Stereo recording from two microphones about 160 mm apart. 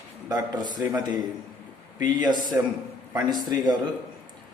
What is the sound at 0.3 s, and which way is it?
A man's voice, 25° right (ahead or behind).